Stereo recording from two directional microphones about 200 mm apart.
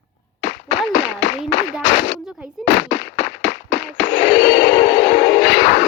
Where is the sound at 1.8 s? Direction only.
60° left (ahead or behind).